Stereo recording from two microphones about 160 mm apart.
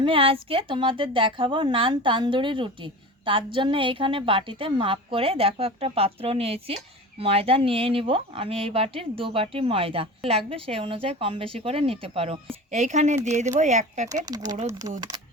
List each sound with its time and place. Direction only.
0.0 s a woman's voice: 35° right (ahead or behind)
14.3 s speech: 25° right (ahead or behind)